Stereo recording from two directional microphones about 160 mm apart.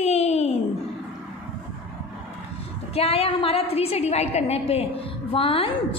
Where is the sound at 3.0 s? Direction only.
35° left (ahead or behind).